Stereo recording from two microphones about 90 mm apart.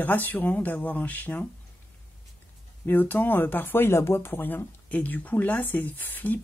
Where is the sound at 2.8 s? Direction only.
20° left (ahead or behind).